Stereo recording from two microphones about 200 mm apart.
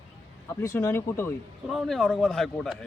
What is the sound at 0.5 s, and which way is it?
Speech, 15° left (ahead or behind).